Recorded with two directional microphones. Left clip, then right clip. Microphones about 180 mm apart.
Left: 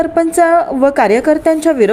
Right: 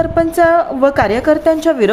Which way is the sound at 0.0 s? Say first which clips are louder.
Left 1 dB; 15° left (ahead or behind).